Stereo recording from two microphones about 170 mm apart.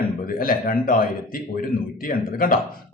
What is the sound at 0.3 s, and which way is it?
Speech, 60° left (ahead or behind).